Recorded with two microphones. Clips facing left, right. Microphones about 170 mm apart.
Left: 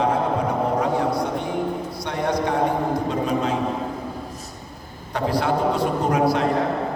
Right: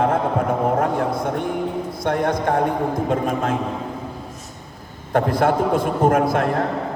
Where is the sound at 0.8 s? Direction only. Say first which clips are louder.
Right 1 dB; 50° right (ahead or behind).